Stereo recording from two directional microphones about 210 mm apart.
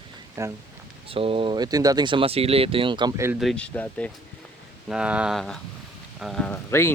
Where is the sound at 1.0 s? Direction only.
25° right (ahead or behind).